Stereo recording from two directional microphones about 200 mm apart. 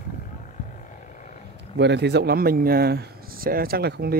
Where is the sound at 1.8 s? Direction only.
60° right (ahead or behind).